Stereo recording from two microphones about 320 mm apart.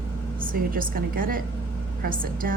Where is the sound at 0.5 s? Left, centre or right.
Right.